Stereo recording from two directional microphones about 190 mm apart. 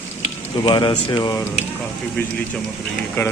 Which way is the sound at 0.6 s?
25° left (ahead or behind).